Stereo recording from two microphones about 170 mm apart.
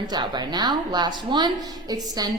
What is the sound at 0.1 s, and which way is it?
A woman's voice, 25° right (ahead or behind).